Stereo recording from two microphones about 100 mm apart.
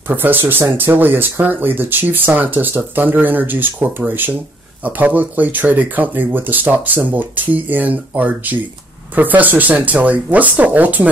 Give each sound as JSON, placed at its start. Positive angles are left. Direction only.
{"t": 0.1, "sound": "speech", "side_deg": -20}